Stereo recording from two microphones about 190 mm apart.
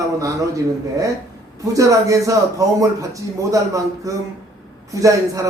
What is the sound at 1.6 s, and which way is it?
Speech, 15° right (ahead or behind).